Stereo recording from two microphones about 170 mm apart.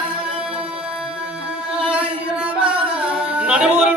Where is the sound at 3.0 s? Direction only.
5° right (ahead or behind).